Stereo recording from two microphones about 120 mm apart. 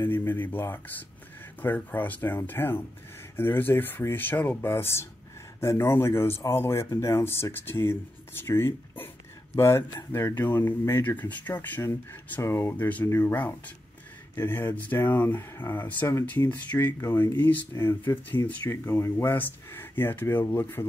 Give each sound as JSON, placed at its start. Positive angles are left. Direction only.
{"t": 0.0, "sound": "speech", "side_deg": 15}